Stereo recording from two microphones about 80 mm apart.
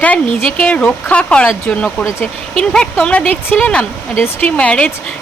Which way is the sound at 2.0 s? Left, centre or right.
Left.